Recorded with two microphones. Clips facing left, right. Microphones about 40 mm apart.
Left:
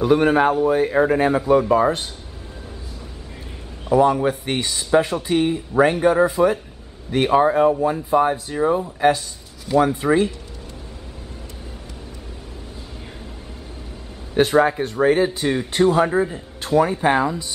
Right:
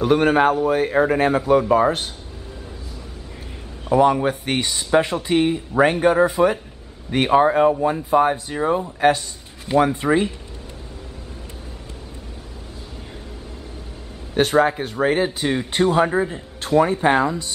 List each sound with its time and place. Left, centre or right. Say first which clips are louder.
0.0 s speech: even; centre
3.9 s speech: even; centre
9.7 s speech: even; right
10.0 s speech: left 1 dB; centre
14.3 s speech: left 1 dB; centre